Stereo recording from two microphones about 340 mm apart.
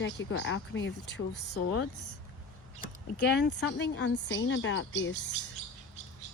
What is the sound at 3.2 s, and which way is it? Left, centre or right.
Speech, left.